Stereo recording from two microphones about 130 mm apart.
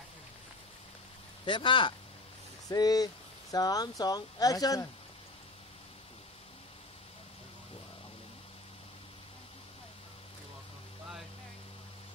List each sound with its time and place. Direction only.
1.4 s speech: 40° left (ahead or behind)